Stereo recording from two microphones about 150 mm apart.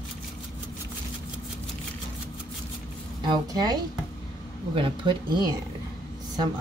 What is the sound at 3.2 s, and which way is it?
A woman's voice, 30° right (ahead or behind).